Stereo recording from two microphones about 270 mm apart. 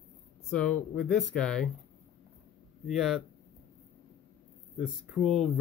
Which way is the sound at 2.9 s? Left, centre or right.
Centre.